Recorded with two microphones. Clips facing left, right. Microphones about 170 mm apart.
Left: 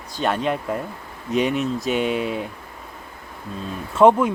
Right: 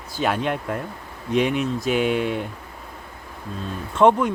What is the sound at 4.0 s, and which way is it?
Speech, 5° left (ahead or behind).